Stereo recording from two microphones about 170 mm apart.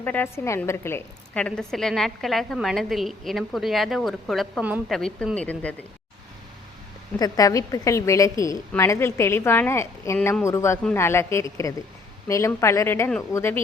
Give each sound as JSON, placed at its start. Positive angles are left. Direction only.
{"t": 0.0, "sound": "a woman's voice", "side_deg": 10}
{"t": 7.2, "sound": "a woman's voice", "side_deg": 20}